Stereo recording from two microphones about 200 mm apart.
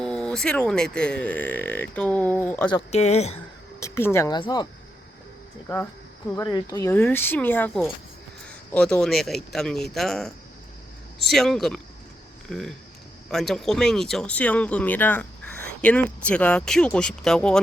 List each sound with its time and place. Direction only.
0.0 s speech: 5° left (ahead or behind)
2.7 s speech: 35° left (ahead or behind)
3.8 s speech: 15° left (ahead or behind)
5.6 s speech: 10° left (ahead or behind)